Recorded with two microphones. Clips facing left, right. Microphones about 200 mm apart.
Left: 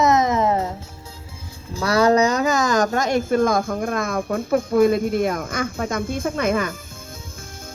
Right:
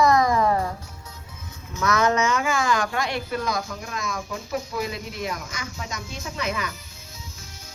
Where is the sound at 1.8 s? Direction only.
35° left (ahead or behind); by 6.7 s 50° left (ahead or behind).